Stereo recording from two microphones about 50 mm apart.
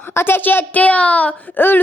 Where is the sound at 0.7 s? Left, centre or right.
Left.